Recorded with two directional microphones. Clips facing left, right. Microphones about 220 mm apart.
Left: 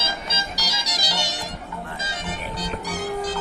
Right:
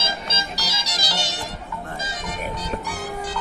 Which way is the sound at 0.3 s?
15° left (ahead or behind).